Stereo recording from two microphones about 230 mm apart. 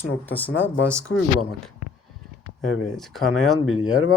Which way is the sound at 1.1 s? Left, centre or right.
Left.